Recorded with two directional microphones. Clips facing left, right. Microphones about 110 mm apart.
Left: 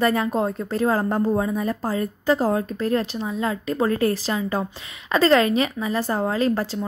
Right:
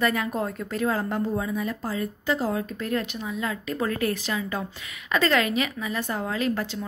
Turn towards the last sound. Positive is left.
turn(degrees=35)  # may be behind; listen again after turning